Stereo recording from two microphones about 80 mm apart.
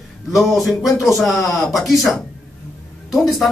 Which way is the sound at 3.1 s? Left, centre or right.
Centre.